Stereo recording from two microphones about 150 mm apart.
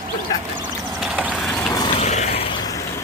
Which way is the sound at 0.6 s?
Centre (ahead or behind).